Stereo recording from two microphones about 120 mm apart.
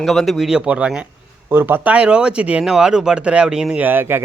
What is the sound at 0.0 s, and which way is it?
Speech, centre (ahead or behind).